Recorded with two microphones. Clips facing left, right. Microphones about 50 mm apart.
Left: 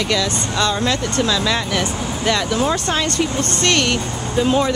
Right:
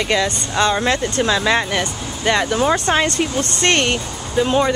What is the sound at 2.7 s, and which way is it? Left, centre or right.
Speech, centre.